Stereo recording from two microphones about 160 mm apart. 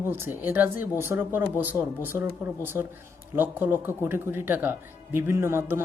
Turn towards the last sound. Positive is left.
turn(degrees=-15)  # may be behind; listen again after turning